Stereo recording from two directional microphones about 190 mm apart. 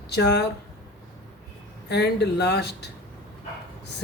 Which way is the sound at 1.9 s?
60° left (ahead or behind).